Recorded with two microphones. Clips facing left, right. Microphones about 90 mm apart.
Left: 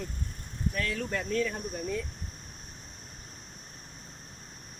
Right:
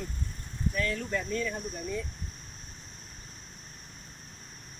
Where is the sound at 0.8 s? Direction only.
80° left.